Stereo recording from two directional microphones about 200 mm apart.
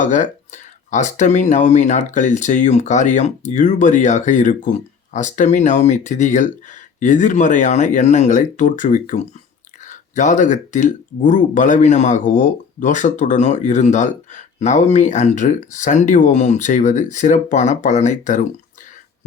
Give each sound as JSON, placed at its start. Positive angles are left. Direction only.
{"t": 0.0, "sound": "speech", "side_deg": 40}